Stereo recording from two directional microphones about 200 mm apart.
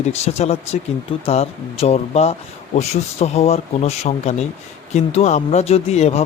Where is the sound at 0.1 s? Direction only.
30° left (ahead or behind).